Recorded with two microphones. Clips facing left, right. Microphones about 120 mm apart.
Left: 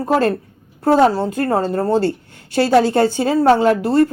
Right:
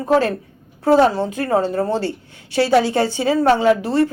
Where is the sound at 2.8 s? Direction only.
50° left (ahead or behind).